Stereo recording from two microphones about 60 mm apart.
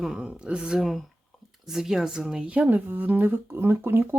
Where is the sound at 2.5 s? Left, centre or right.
Right.